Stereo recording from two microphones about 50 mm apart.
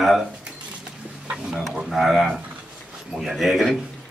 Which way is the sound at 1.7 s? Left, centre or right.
Centre.